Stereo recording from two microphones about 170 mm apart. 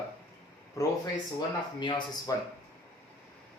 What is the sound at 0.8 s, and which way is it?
Speech, 20° left (ahead or behind).